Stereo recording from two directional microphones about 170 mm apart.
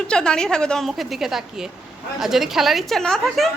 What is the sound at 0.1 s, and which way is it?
A woman's voice, 5° left (ahead or behind).